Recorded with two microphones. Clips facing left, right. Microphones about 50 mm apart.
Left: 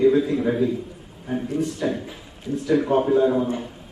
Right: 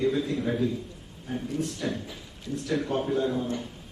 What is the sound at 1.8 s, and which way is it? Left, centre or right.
A man's voice, left.